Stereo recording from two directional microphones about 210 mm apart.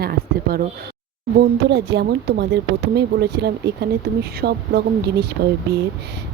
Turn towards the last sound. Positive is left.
turn(degrees=-50)  # may be behind; listen again after turning